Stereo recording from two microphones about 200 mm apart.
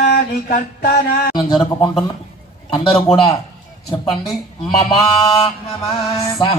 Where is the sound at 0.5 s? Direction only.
40° left (ahead or behind).